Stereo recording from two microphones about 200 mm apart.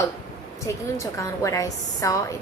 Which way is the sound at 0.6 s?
15° left (ahead or behind).